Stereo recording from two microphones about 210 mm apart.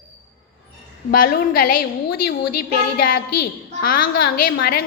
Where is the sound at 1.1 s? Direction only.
45° left (ahead or behind).